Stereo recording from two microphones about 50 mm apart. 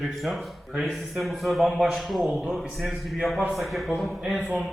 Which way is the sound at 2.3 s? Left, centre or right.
Right.